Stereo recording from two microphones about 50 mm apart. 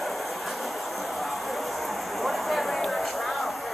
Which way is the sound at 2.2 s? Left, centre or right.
Centre.